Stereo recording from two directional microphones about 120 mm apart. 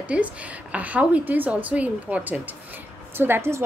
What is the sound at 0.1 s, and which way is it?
A woman's voice, 10° right (ahead or behind).